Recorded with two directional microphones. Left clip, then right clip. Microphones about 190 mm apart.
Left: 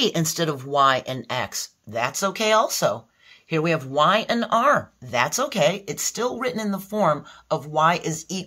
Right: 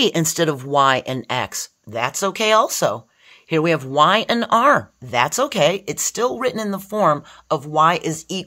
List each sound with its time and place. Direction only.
0.0 s speech: 40° right (ahead or behind)